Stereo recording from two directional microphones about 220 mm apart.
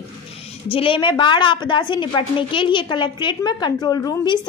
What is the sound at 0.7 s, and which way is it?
A woman's voice, 25° left (ahead or behind).